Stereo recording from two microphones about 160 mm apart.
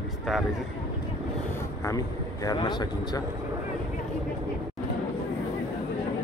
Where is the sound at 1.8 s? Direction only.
20° left (ahead or behind).